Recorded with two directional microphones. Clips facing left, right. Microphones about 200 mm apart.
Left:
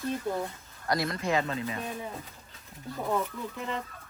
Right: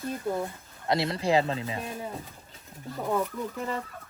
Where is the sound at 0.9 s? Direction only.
25° right (ahead or behind).